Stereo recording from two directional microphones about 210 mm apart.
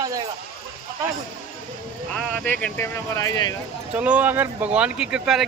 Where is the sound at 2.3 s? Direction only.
5° left (ahead or behind).